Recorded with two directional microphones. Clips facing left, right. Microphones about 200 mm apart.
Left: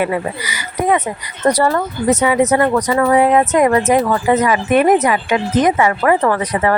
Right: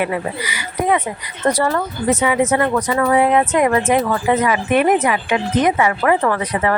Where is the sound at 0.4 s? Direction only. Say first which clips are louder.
Left 2 dB; 40° left (ahead or behind).